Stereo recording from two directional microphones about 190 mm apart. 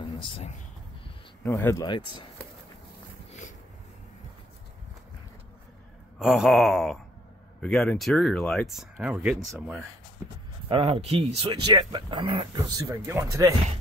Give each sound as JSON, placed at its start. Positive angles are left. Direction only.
{"t": 0.2, "sound": "speech", "side_deg": 25}
{"t": 1.4, "sound": "speech", "side_deg": 15}
{"t": 6.1, "sound": "speech", "side_deg": 0}
{"t": 10.7, "sound": "speech", "side_deg": -30}